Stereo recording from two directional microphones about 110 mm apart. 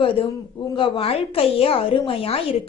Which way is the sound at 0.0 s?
55° left (ahead or behind).